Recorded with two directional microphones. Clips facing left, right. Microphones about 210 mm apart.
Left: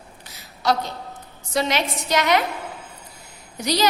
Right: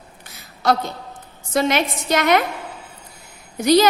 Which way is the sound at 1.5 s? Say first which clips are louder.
Right 4 dB; 50° right (ahead or behind).